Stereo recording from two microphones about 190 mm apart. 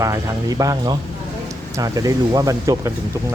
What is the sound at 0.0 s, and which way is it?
Speech, 20° right (ahead or behind).